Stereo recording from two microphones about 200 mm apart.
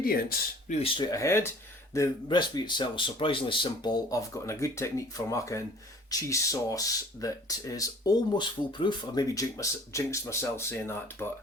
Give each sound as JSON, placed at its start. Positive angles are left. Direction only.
{"t": 0.0, "sound": "speech", "side_deg": 45}
{"t": 0.8, "sound": "speech", "side_deg": 20}